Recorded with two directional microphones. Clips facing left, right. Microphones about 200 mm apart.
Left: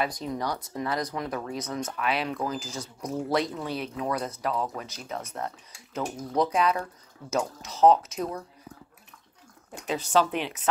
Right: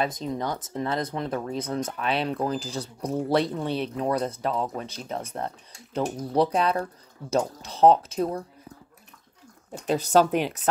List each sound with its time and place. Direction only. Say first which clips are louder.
0.0 s speech: right 2 dB; 25° right (ahead or behind)
9.7 s speech: right 5 dB; 40° right (ahead or behind)